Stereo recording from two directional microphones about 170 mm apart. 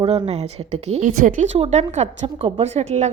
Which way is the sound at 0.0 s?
35° right (ahead or behind).